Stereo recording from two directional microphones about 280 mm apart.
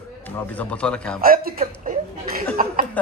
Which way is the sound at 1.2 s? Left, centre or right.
Right.